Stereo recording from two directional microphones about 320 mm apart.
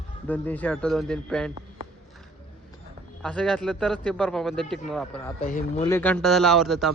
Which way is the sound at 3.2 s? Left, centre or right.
Centre.